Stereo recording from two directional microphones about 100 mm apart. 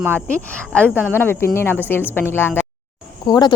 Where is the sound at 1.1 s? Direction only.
25° left (ahead or behind).